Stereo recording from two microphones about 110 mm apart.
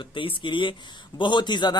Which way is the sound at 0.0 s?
50° left (ahead or behind).